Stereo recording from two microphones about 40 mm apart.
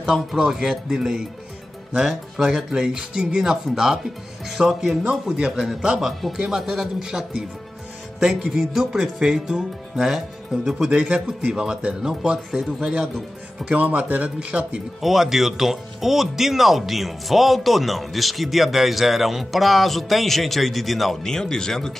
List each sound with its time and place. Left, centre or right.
0.0 s speech: centre
10.9 s speech: right
12.1 s speech: centre
13.7 s speech: right
15.0 s speech: centre
21.2 s speech: centre